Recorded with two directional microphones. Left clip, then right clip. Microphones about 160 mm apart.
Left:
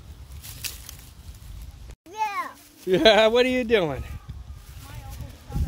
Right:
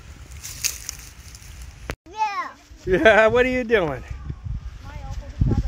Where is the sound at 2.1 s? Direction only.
15° left (ahead or behind).